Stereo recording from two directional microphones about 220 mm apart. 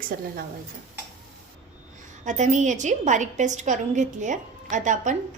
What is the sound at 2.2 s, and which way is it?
A woman's voice, 30° right (ahead or behind).